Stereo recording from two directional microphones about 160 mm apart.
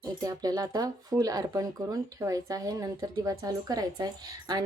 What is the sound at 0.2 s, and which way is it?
Speech, 25° right (ahead or behind).